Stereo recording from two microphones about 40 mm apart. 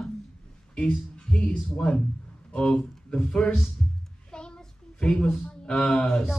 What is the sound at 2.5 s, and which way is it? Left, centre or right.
Speech, left.